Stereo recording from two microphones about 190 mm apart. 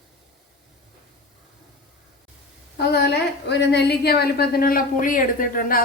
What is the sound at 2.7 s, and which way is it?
A woman's voice, 55° left (ahead or behind).